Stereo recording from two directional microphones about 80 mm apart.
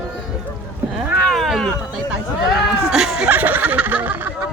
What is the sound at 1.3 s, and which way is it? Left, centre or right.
Cat, centre.